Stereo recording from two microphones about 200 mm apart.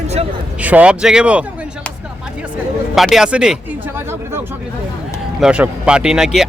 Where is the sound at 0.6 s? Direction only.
5° right (ahead or behind).